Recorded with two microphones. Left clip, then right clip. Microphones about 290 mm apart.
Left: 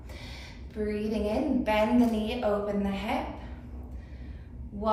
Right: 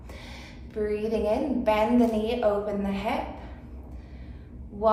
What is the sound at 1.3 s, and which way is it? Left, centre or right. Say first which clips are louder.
Speech: right 2 dB; right.